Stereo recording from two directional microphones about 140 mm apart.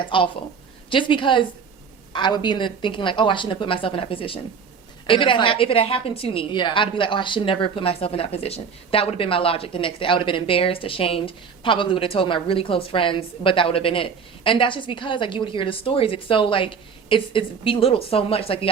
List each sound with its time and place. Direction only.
0.0 s a woman's voice: 35° left (ahead or behind)